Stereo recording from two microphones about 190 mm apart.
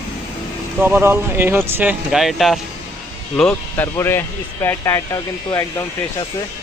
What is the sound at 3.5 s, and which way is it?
Speech, 10° left (ahead or behind).